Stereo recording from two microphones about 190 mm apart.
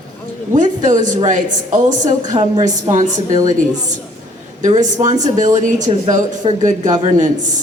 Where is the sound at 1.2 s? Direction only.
40° right (ahead or behind).